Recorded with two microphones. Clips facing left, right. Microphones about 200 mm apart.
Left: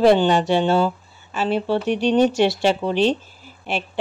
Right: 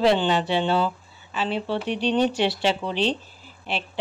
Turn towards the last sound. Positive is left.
turn(degrees=50)  # may be behind; listen again after turning